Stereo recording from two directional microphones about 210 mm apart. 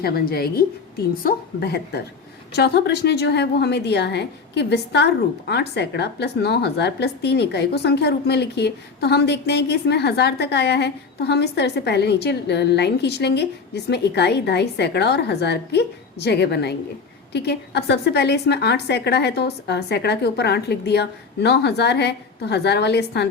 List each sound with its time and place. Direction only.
0.0 s a woman's voice: 45° left (ahead or behind)